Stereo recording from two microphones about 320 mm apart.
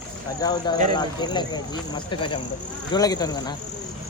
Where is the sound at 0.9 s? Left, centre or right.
Centre.